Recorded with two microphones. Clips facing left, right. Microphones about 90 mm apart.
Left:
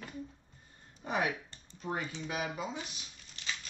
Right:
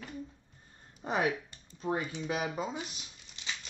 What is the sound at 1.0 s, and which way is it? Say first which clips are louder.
Speech: right 2 dB; 35° right (ahead or behind).